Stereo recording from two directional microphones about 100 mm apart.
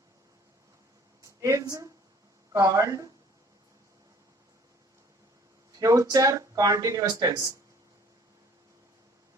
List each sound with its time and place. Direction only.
1.2 s a sound: 30° right (ahead or behind)
1.6 s speech: 35° right (ahead or behind)
5.7 s speech: 35° right (ahead or behind)